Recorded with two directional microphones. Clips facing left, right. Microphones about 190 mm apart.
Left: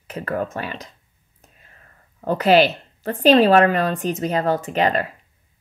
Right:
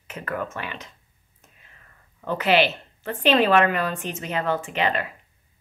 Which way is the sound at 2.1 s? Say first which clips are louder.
Left 5 dB; 40° left (ahead or behind).